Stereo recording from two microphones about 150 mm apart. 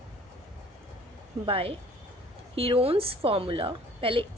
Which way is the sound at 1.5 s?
40° right (ahead or behind).